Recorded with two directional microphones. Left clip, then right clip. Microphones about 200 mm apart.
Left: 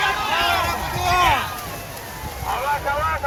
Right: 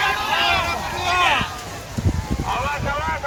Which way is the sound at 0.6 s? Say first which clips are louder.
Left 1 dB; 30° left (ahead or behind).